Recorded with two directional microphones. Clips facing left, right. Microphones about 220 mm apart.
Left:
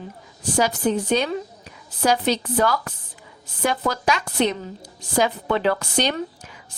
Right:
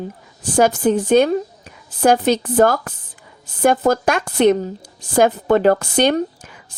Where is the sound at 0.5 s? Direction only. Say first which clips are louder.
Right 6 dB; 50° right (ahead or behind).